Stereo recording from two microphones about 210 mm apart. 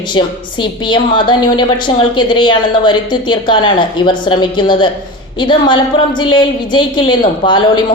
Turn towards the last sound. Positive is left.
turn(degrees=25)  # may be behind; listen again after turning